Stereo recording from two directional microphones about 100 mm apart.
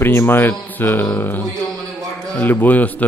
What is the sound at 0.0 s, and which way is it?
A man's voice, 25° left (ahead or behind).